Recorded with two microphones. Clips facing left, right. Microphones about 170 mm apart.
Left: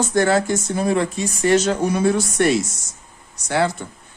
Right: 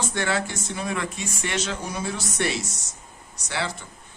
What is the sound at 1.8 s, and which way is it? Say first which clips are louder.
Speech: left 12 dB; 60° left (ahead or behind).